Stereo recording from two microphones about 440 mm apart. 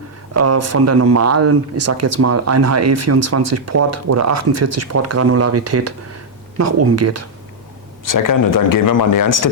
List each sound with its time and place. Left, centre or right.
0.3 s speech: right
8.0 s speech: left